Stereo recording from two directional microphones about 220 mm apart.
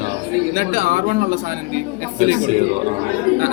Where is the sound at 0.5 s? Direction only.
40° right (ahead or behind).